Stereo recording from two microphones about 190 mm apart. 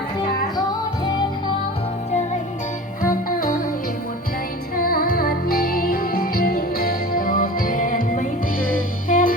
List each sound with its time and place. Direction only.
3.0 s music: 45° left (ahead or behind)
4.8 s music: 50° left (ahead or behind)